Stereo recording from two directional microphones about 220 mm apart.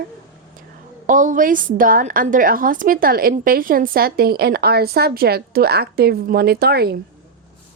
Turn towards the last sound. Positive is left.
turn(degrees=-45)  # may be behind; listen again after turning